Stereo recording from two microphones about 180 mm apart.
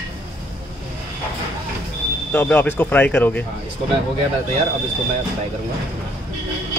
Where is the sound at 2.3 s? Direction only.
10° left (ahead or behind).